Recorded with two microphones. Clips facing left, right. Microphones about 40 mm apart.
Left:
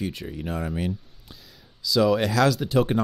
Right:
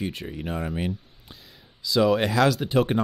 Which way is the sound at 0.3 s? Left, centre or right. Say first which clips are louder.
Even; centre.